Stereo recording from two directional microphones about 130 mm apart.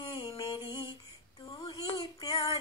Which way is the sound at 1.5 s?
35° left (ahead or behind).